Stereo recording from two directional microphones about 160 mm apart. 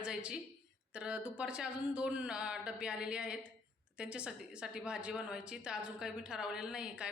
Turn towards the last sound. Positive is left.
turn(degrees=-5)  # may be behind; listen again after turning